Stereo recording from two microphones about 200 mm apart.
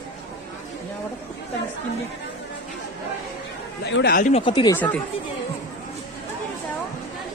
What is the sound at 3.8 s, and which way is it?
Speech, 55° left (ahead or behind).